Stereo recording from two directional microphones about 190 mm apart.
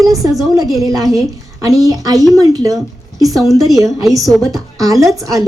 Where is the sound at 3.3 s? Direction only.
Centre (ahead or behind).